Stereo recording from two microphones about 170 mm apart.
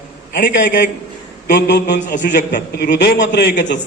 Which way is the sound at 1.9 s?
50° left (ahead or behind).